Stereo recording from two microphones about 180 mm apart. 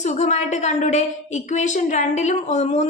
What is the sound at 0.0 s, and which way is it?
A woman's voice, 40° left (ahead or behind).